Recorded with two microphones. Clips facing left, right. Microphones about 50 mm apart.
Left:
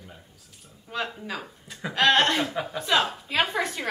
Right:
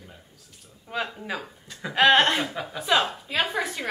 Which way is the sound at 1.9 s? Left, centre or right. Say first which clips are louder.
Right 2 dB; centre.